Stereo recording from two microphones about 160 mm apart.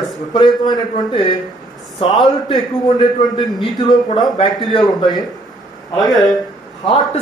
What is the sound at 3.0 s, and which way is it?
A man's voice, 30° left (ahead or behind).